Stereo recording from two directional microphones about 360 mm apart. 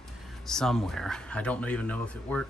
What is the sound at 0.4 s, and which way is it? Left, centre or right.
Speech, centre.